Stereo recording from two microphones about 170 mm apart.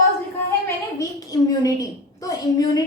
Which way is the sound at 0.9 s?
20° left (ahead or behind).